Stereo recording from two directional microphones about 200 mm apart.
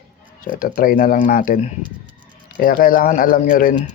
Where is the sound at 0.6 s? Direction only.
45° left (ahead or behind).